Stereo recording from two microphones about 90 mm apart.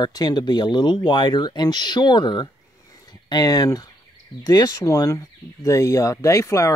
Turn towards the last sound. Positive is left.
turn(degrees=35)  # may be behind; listen again after turning